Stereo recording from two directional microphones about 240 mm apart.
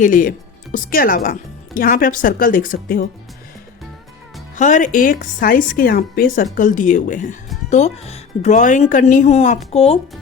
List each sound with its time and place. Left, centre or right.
0.0 s speech: left
4.5 s speech: left